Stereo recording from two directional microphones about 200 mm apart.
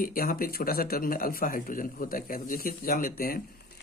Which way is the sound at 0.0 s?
45° left (ahead or behind).